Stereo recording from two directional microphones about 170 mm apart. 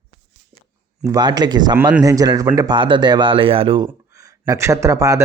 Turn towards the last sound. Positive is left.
turn(degrees=-20)  # may be behind; listen again after turning